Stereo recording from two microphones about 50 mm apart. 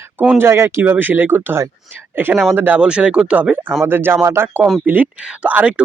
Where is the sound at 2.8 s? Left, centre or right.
Right.